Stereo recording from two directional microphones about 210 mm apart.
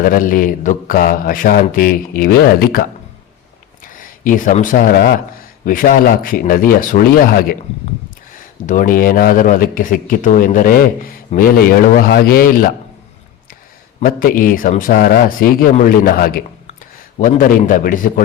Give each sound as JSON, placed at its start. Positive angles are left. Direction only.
{"t": 0.0, "sound": "mantra", "side_deg": 40}
{"t": 3.9, "sound": "speech", "side_deg": 40}
{"t": 5.6, "sound": "mantra", "side_deg": 40}
{"t": 8.3, "sound": "speech", "side_deg": 40}
{"t": 14.0, "sound": "speech", "side_deg": 40}
{"t": 15.7, "sound": "mantra", "side_deg": 40}
{"t": 17.2, "sound": "speech", "side_deg": 40}